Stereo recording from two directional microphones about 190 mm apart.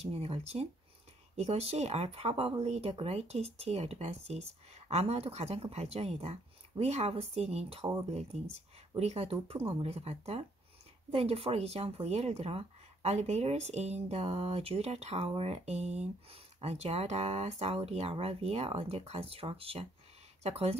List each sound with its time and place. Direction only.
0.0 s speech: 35° right (ahead or behind)
7.8 s speech: 20° right (ahead or behind)
8.1 s speech: 35° right (ahead or behind)